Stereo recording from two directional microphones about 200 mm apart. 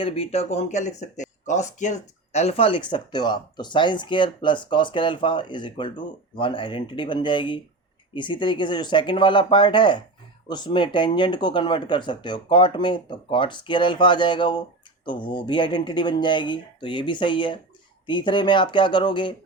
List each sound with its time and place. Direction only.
0.0 s speech: 30° left (ahead or behind)